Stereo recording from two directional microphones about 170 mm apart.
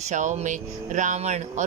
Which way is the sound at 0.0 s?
45° right (ahead or behind).